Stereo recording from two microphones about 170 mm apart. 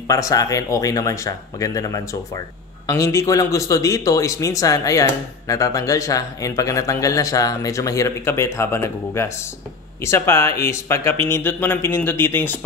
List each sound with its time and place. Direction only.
0.1 s speech: 20° left (ahead or behind)